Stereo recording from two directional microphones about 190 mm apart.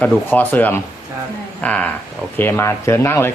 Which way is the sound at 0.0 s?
10° left (ahead or behind).